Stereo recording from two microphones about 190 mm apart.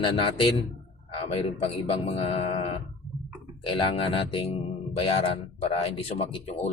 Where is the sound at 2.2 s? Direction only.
30° left (ahead or behind).